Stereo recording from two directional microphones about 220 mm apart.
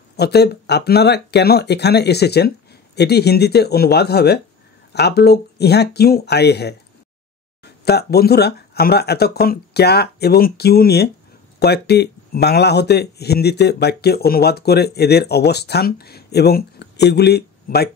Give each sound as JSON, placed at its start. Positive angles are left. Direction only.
{"t": 0.1, "sound": "speech", "side_deg": 50}